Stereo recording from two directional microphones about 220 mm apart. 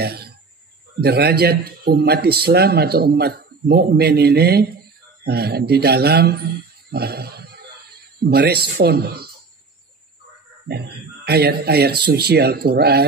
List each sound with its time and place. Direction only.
0.0 s a man's voice: 45° right (ahead or behind)
10.7 s a man's voice: 45° right (ahead or behind)